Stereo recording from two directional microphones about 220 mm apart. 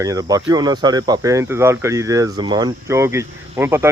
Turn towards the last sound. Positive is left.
turn(degrees=-10)  # may be behind; listen again after turning